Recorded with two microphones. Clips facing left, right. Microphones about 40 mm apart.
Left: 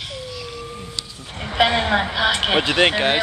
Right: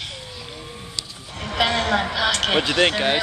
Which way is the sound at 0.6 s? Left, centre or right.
Centre.